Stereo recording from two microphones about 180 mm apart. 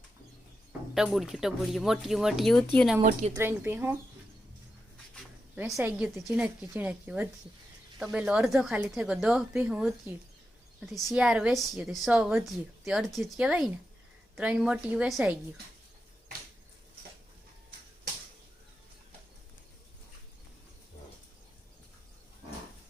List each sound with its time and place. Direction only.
0.9 s a woman's voice: centre (ahead or behind)
3.3 s a woman's voice: 10° right (ahead or behind)
5.5 s a woman's voice: 5° right (ahead or behind)